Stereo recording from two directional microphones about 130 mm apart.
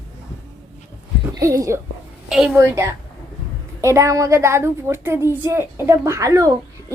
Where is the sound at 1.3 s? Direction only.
25° right (ahead or behind).